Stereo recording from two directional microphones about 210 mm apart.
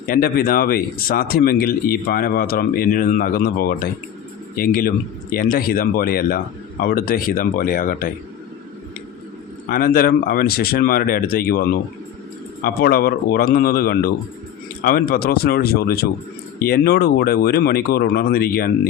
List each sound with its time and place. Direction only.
0.1 s speech: 45° left (ahead or behind)
9.6 s speech: 45° left (ahead or behind)